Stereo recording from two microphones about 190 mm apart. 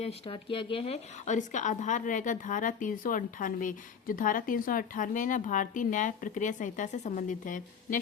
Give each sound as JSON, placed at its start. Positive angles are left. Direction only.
{"t": 0.0, "sound": "speech", "side_deg": 30}